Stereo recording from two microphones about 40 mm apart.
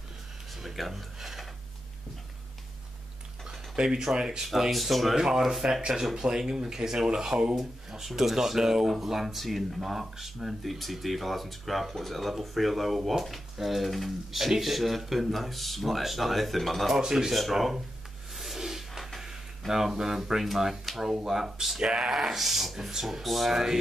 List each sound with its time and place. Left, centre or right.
0.6 s speech: centre
3.4 s speech: centre
4.5 s speech: centre
5.1 s speech: centre
7.5 s speech: centre
17.0 s speech: centre
18.3 s a sound: centre
19.1 s speech: centre